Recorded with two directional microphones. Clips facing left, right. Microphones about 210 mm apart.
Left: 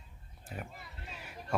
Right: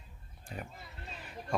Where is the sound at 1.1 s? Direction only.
5° left (ahead or behind).